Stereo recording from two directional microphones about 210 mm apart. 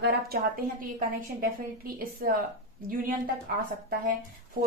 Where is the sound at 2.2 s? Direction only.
40° right (ahead or behind).